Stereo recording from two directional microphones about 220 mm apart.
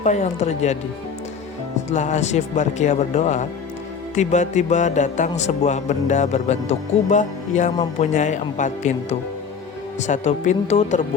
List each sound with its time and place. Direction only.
0.0 s speech: 30° left (ahead or behind)
1.9 s speech: 30° left (ahead or behind)